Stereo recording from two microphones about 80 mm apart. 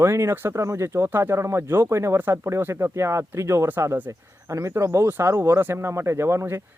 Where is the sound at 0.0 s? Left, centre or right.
Right.